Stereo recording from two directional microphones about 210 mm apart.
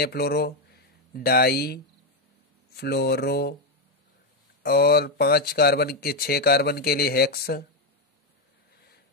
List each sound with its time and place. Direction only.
0.0 s speech: 50° left (ahead or behind)
4.6 s speech: 50° left (ahead or behind)